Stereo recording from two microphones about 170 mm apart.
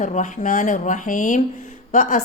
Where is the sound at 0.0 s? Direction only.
45° left (ahead or behind).